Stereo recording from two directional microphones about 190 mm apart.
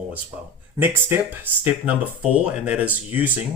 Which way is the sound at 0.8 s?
10° right (ahead or behind).